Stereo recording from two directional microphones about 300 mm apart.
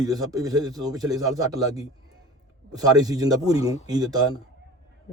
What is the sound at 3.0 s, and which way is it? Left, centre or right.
A man's voice, centre.